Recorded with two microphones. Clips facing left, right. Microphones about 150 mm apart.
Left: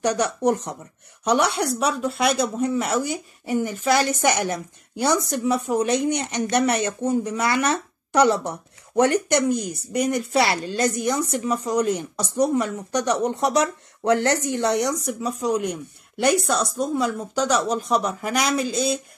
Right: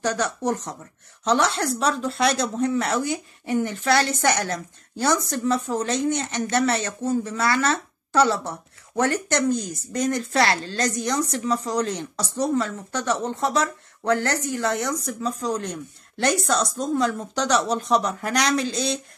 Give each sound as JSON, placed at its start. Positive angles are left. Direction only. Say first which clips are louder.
{"t": 0.0, "sound": "a woman's voice", "louder": "left 3 dB", "side_deg": 15}